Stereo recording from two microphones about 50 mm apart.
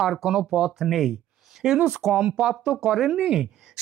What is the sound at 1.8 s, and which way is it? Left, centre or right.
Speech, right.